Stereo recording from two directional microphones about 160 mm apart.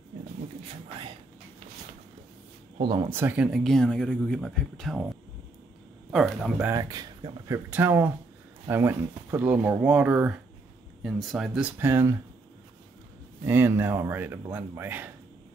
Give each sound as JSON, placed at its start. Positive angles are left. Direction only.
{"t": 2.8, "sound": "speech", "side_deg": -30}
{"t": 3.1, "sound": "speech", "side_deg": -15}
{"t": 6.1, "sound": "speech", "side_deg": 0}
{"t": 6.7, "sound": "speech", "side_deg": -25}
{"t": 13.5, "sound": "speech", "side_deg": -15}